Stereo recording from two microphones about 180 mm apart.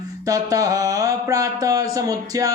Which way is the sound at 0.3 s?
20° right (ahead or behind).